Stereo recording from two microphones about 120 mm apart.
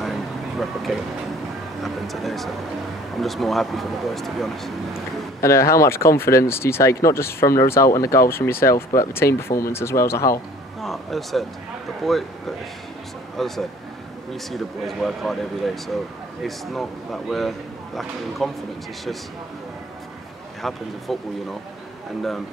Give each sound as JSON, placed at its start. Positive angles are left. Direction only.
{"t": 0.0, "sound": "vehicle", "side_deg": 0}
{"t": 1.8, "sound": "a man's voice", "side_deg": 0}
{"t": 5.4, "sound": "speech", "side_deg": 25}
{"t": 10.8, "sound": "a man's voice", "side_deg": 0}
{"t": 20.6, "sound": "a man's voice", "side_deg": 0}